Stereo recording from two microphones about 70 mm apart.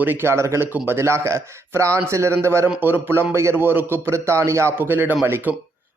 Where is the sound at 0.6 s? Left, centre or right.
Right.